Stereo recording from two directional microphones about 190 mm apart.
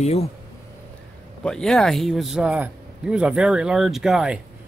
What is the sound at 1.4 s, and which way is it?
A man's voice, 5° left (ahead or behind).